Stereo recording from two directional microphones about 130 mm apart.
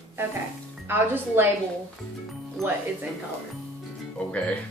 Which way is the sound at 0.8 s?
15° right (ahead or behind).